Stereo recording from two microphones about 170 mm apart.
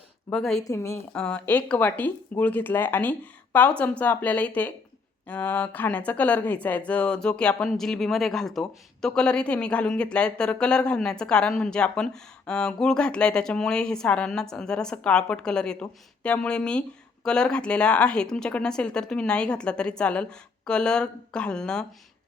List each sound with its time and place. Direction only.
0.3 s speech: centre (ahead or behind)
0.6 s a woman's voice: 20° left (ahead or behind)
1.1 s speech: 5° left (ahead or behind)